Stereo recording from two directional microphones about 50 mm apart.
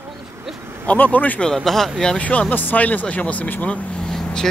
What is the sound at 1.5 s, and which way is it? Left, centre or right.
Speech, centre.